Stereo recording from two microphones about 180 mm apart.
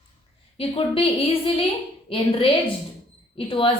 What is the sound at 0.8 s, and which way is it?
A woman's voice, 30° left (ahead or behind).